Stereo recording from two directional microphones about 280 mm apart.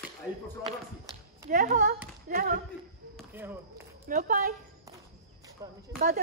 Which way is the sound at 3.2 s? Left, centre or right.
Centre.